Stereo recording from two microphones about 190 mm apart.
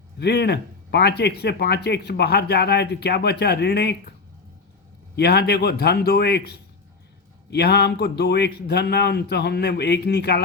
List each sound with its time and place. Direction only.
0.2 s speech: 60° left (ahead or behind)
5.1 s speech: 60° left (ahead or behind)